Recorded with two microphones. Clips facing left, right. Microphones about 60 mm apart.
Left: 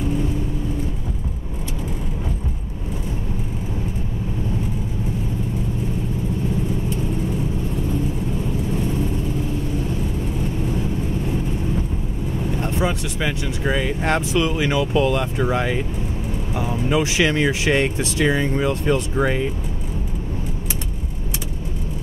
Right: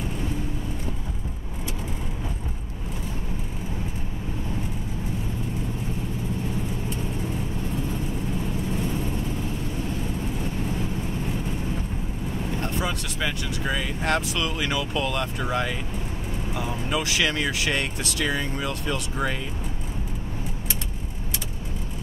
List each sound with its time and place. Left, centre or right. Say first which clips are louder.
12.6 s speech: left 7 dB; left